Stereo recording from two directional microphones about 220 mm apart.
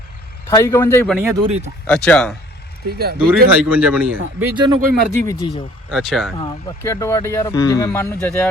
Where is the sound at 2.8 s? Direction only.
45° right (ahead or behind).